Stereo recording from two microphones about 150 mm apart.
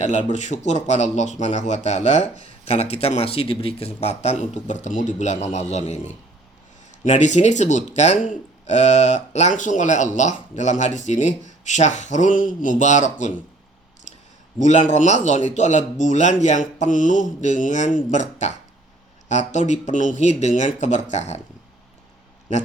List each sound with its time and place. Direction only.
0.0 s speech: 50° left (ahead or behind)
7.0 s speech: 50° left (ahead or behind)
14.6 s speech: 50° left (ahead or behind)